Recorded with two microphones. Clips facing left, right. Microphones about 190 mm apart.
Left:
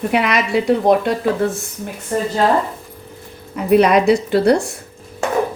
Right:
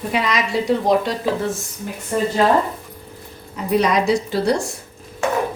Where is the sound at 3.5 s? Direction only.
60° left (ahead or behind).